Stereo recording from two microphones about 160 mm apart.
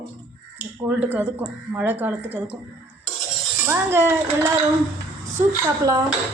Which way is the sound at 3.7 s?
15° right (ahead or behind).